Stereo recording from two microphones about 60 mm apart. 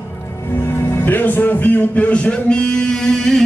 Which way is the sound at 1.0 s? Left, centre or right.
Left.